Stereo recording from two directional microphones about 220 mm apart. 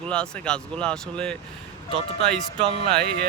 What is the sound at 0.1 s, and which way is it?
Speech, 5° left (ahead or behind).